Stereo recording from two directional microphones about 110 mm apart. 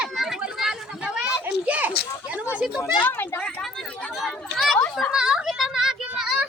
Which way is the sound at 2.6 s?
10° right (ahead or behind).